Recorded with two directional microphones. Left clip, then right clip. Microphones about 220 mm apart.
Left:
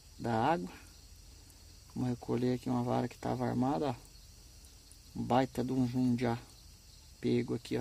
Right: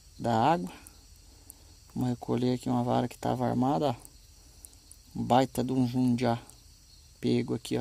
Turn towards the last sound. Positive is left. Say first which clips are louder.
# right 4 dB
turn(degrees=-35)  # may be behind; listen again after turning